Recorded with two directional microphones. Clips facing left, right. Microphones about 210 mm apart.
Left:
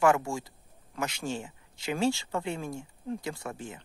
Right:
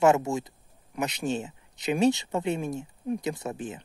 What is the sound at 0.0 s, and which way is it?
Speech, 20° right (ahead or behind).